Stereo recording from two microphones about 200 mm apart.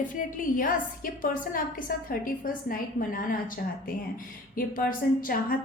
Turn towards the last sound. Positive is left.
turn(degrees=45)  # may be behind; listen again after turning